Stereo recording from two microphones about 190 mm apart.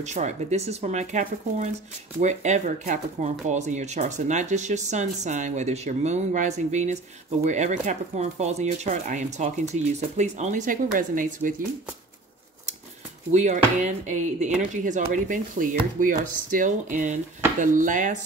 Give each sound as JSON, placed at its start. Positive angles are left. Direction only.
{"t": 0.0, "sound": "speech", "side_deg": -40}
{"t": 13.3, "sound": "speech", "side_deg": -40}